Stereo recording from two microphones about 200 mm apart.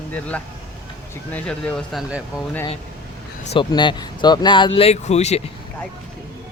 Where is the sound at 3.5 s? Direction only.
25° left (ahead or behind).